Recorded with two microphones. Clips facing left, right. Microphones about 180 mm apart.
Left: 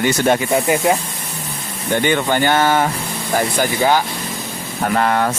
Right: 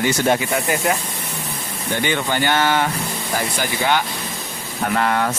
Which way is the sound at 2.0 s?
45° left (ahead or behind).